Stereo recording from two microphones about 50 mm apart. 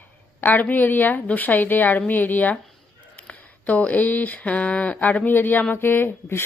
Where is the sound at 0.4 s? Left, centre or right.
Left.